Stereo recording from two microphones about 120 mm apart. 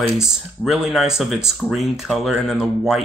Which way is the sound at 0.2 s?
5° right (ahead or behind).